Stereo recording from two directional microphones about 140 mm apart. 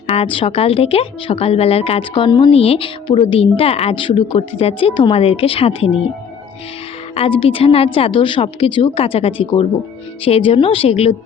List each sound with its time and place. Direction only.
0.1 s speech: 45° left (ahead or behind)
7.1 s a woman's voice: 40° left (ahead or behind)